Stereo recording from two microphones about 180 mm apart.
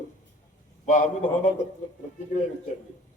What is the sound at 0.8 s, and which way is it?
A man's voice, 45° left (ahead or behind).